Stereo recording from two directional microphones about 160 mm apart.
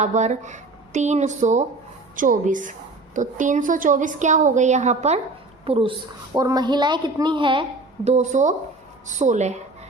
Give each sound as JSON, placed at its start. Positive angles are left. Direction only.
{"t": 0.0, "sound": "a woman's voice", "side_deg": -45}
{"t": 5.6, "sound": "a woman's voice", "side_deg": -35}
{"t": 8.0, "sound": "a woman's voice", "side_deg": -45}